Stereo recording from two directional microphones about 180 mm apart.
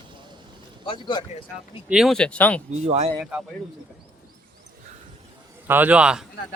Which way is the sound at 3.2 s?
5° right (ahead or behind).